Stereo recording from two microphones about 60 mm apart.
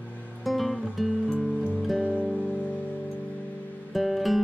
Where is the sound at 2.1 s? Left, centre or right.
Centre.